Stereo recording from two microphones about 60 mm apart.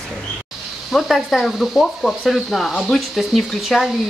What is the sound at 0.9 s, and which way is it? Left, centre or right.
Speech, centre.